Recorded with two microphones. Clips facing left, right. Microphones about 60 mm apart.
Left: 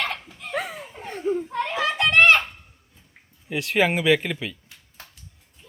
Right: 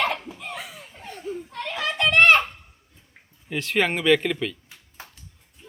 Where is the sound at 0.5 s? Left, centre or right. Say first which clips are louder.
Left 12 dB; left.